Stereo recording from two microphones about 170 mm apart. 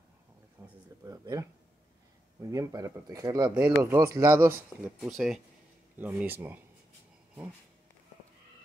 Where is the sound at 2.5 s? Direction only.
20° right (ahead or behind).